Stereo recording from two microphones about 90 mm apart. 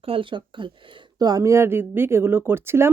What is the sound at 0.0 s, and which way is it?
Speech, 80° right.